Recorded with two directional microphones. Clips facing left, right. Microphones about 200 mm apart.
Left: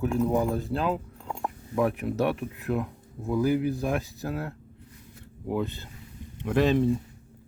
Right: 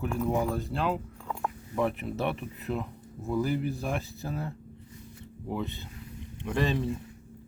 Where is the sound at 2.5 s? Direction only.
Centre (ahead or behind).